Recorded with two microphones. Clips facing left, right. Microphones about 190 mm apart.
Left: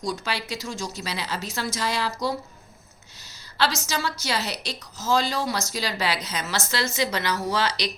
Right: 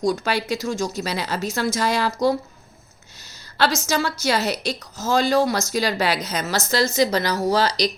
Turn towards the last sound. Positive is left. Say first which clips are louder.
# right 6 dB
turn(degrees=-40)  # may be behind; listen again after turning